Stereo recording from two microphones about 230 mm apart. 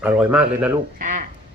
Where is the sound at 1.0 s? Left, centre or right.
Right.